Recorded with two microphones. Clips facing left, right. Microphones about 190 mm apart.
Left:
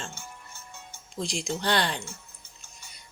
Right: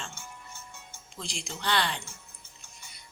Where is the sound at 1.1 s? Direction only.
40° left (ahead or behind).